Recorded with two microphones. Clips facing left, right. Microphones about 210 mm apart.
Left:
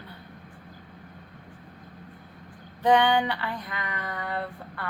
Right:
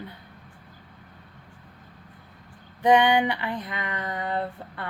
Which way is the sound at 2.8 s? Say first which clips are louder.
Right 2 dB; 15° right (ahead or behind).